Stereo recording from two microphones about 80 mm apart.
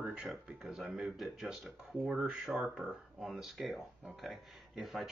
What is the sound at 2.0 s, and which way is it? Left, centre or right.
Speech, centre.